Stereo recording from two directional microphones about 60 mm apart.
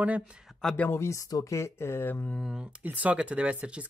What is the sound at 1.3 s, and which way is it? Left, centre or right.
Speech, left.